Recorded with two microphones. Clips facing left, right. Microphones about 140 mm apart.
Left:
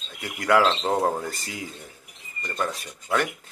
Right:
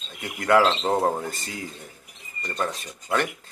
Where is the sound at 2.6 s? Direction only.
Centre (ahead or behind).